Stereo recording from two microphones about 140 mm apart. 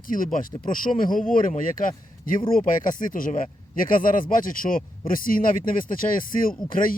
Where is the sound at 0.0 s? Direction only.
75° left (ahead or behind).